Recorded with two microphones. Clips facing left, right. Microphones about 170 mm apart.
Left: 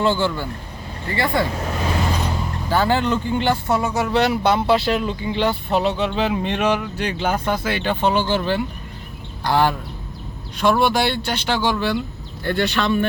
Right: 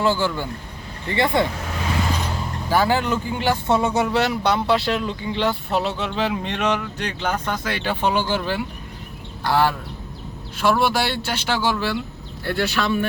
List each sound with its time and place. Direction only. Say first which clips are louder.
0.0 s speech: left 1 dB; 10° right (ahead or behind)
1.1 s speech: right 1 dB; 20° right (ahead or behind)
2.6 s speech: left 1 dB; 10° right (ahead or behind)
3.7 s speech: right 1 dB; 20° right (ahead or behind)
4.1 s speech: left 2 dB; centre (ahead or behind)